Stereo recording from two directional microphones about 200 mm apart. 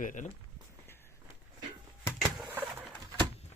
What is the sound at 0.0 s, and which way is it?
Speech, 40° left (ahead or behind).